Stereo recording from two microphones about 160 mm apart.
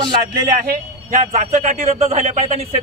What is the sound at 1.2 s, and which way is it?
A man's voice, 45° right (ahead or behind).